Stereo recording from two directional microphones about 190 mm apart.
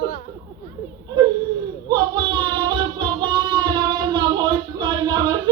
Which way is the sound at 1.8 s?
25° right (ahead or behind).